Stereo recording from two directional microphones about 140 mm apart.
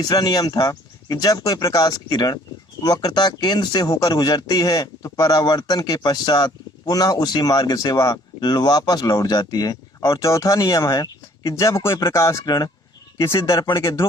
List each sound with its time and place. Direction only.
0.0 s speech: 30° left (ahead or behind)